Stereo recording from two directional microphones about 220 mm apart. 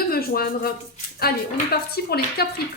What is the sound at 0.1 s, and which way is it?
Speech, 45° left (ahead or behind).